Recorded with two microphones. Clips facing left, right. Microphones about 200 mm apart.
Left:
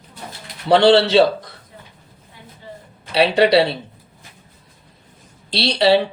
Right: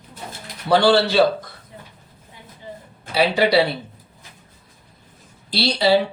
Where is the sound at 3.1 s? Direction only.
65° left (ahead or behind).